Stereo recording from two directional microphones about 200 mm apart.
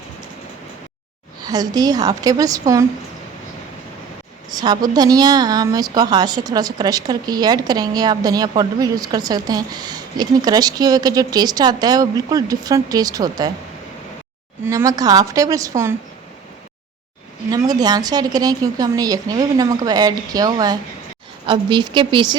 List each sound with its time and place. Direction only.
1.5 s speech: 20° right (ahead or behind)
4.5 s speech: 20° right (ahead or behind)
14.6 s a woman's voice: 15° right (ahead or behind)
17.5 s speech: 20° right (ahead or behind)